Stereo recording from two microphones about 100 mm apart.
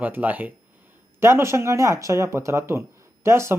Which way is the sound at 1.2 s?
25° right (ahead or behind).